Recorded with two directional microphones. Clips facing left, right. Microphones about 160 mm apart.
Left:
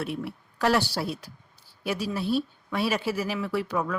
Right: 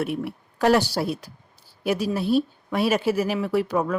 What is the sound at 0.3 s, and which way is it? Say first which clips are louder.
Speech: right 5 dB; 45° right (ahead or behind).